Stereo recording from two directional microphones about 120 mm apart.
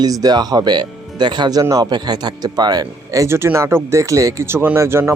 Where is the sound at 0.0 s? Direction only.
35° right (ahead or behind).